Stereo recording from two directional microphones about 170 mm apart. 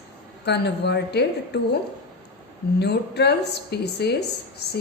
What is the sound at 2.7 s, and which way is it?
A woman's voice, 75° left (ahead or behind).